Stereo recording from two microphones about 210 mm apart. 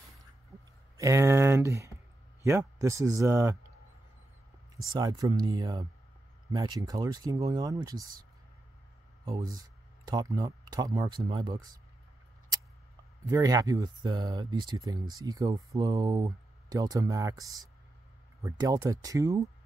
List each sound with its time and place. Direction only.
0.9 s speech: 15° right (ahead or behind)
4.9 s speech: 20° right (ahead or behind)
9.2 s speech: 20° right (ahead or behind)
13.2 s speech: 15° right (ahead or behind)